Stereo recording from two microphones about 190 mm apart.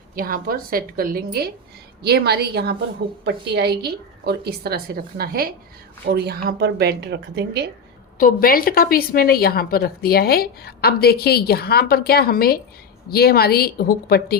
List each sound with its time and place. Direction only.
0.2 s a woman's voice: 50° right (ahead or behind)
8.2 s a woman's voice: 50° left (ahead or behind)